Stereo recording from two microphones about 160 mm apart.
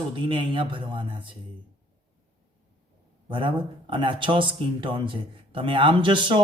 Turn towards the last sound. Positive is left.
turn(degrees=-30)  # may be behind; listen again after turning